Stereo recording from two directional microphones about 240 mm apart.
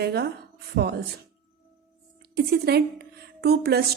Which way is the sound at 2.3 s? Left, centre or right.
Right.